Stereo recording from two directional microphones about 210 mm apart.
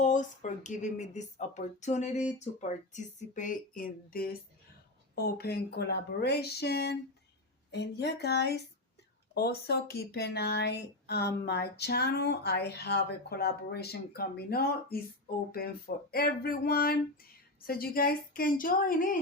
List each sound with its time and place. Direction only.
0.0 s a woman's voice: 35° left (ahead or behind)
16.1 s a woman's voice: 45° left (ahead or behind)